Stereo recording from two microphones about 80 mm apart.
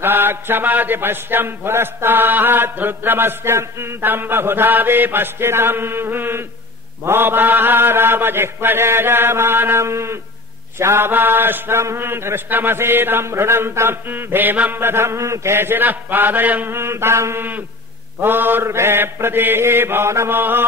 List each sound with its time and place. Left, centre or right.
0.0 s mantra: right